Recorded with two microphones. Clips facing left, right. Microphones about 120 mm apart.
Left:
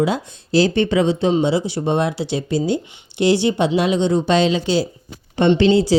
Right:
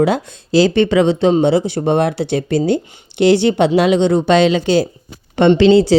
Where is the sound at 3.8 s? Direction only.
75° right (ahead or behind); by 4.9 s 55° right (ahead or behind).